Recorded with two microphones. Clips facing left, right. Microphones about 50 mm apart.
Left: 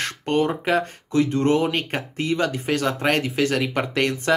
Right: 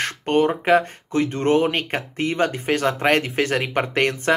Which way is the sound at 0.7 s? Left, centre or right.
Right.